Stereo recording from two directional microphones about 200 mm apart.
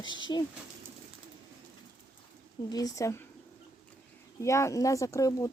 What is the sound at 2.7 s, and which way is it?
Speech, 15° left (ahead or behind).